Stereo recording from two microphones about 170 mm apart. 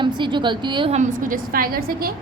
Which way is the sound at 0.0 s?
30° right (ahead or behind).